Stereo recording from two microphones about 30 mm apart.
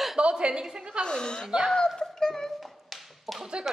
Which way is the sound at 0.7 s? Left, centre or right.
Right.